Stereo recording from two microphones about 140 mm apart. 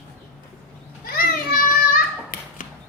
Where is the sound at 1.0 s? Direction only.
90° left.